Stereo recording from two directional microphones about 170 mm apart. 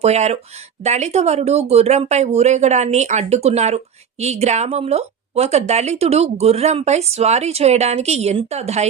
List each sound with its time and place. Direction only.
0.0 s speech: 40° right (ahead or behind)